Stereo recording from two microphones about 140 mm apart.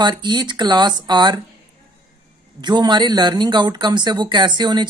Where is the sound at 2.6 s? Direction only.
30° right (ahead or behind).